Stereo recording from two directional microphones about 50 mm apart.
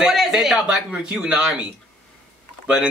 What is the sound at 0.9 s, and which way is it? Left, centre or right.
Speech, centre.